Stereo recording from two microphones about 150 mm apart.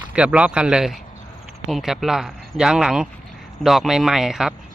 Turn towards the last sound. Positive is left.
turn(degrees=-5)  # may be behind; listen again after turning